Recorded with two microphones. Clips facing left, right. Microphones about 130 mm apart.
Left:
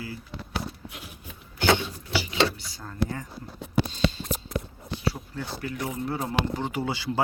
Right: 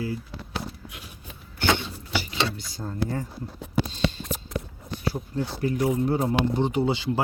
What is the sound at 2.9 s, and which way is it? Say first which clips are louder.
Speech: right 1 dB; 35° right (ahead or behind).